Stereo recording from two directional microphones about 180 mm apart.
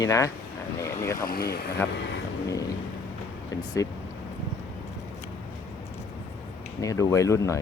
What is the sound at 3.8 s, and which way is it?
Speech, 20° left (ahead or behind).